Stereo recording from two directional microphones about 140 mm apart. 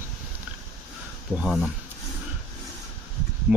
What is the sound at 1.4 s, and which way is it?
Speech, centre (ahead or behind).